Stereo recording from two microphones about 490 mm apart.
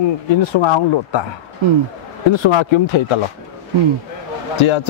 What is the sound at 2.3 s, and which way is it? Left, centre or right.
Speech, left.